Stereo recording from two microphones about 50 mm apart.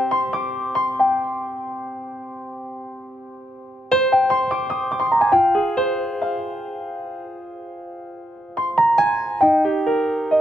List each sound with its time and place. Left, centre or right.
0.0 s music: centre
3.9 s music: centre
8.6 s music: centre
9.8 s keyboard: centre